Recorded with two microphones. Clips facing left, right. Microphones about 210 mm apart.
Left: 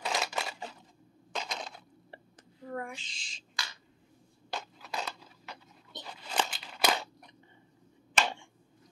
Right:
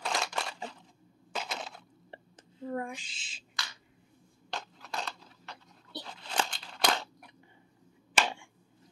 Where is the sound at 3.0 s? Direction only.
5° right (ahead or behind).